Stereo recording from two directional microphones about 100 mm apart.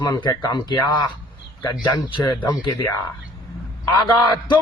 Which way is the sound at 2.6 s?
40° left (ahead or behind).